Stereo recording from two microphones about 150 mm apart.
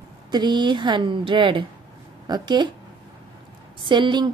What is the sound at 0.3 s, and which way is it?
A woman's voice, 30° right (ahead or behind).